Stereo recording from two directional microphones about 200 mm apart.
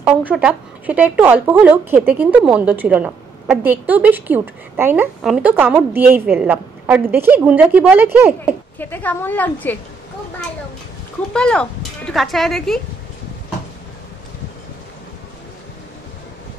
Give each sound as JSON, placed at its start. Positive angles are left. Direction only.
{"t": 0.0, "sound": "speech", "side_deg": -5}
{"t": 8.7, "sound": "a woman's voice", "side_deg": 10}
{"t": 11.3, "sound": "speech", "side_deg": 5}